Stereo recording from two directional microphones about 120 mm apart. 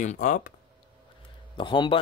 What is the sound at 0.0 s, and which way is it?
Speech, 85° left.